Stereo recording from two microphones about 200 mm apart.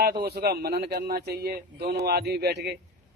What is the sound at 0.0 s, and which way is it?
A man's voice, 50° right (ahead or behind).